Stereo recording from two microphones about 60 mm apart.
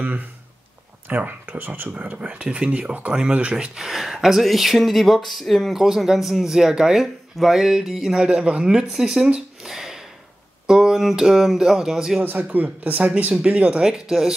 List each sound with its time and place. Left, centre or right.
1.0 s speech: right
3.7 s speech: centre
5.8 s speech: centre
9.6 s a sound: centre
10.7 s speech: centre
12.2 s a man's voice: right; by 14.3 s centre